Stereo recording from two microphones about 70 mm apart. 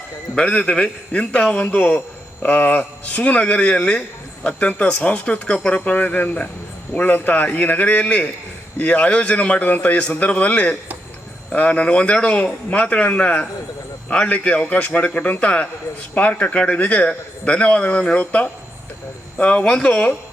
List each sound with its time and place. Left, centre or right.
0.3 s a man's voice: centre